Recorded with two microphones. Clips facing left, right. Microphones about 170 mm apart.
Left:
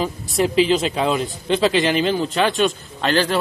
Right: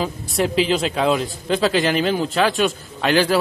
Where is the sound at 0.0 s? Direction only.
Centre (ahead or behind).